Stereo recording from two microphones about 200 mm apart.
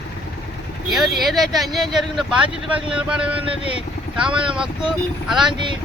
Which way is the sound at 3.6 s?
30° left (ahead or behind).